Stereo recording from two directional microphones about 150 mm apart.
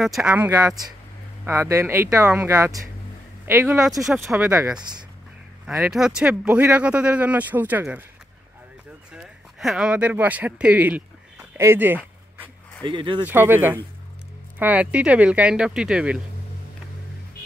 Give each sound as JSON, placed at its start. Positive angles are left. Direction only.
{"t": 0.0, "sound": "speech", "side_deg": -5}
{"t": 0.5, "sound": "speech", "side_deg": -25}
{"t": 3.6, "sound": "speech", "side_deg": -5}
{"t": 4.3, "sound": "speech", "side_deg": -15}
{"t": 4.7, "sound": "speech", "side_deg": -30}
{"t": 5.7, "sound": "speech", "side_deg": 0}
{"t": 9.1, "sound": "a sound", "side_deg": 0}
{"t": 12.8, "sound": "speech", "side_deg": -35}
{"t": 13.2, "sound": "speech", "side_deg": -15}